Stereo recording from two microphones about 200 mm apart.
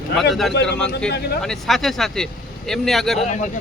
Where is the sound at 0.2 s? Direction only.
Centre (ahead or behind).